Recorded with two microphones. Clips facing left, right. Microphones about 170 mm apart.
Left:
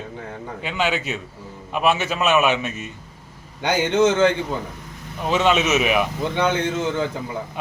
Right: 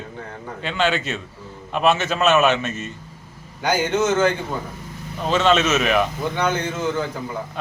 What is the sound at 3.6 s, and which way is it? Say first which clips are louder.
Speech: left 2 dB; 25° left (ahead or behind).